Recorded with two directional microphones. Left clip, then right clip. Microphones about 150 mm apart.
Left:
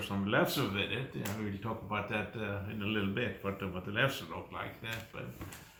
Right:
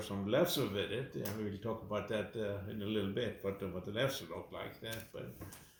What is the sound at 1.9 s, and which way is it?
Speech, 10° left (ahead or behind).